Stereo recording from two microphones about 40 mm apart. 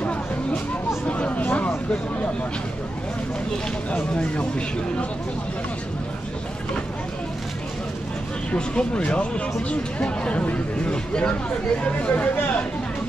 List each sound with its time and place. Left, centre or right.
1.0 s a sound: left
3.9 s speech: left
8.5 s speech: left